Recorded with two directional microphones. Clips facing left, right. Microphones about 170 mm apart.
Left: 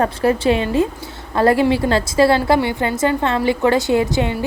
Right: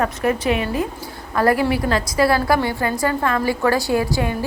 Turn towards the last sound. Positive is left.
turn(degrees=20)  # may be behind; listen again after turning